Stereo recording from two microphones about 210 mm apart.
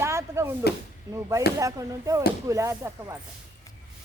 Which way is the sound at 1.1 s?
15° right (ahead or behind).